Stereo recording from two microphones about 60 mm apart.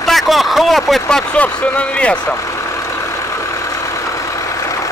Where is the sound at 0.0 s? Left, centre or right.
Centre.